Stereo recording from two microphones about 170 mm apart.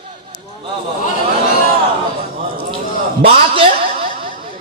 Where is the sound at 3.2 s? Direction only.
35° right (ahead or behind).